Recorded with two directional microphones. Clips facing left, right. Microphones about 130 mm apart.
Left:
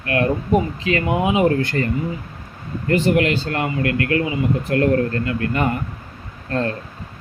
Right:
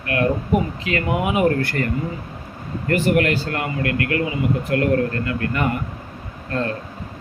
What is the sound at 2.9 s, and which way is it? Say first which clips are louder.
Speech: left 1 dB; 20° left (ahead or behind).